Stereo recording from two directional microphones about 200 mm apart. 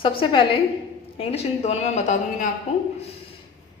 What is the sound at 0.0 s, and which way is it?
A woman's voice, 25° left (ahead or behind).